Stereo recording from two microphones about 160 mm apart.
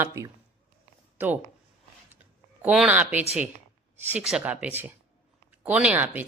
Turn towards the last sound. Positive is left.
turn(degrees=-10)  # may be behind; listen again after turning